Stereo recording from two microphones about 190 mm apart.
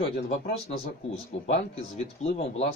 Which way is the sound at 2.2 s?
35° left (ahead or behind).